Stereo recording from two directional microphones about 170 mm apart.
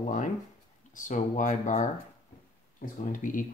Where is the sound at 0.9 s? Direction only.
50° left (ahead or behind).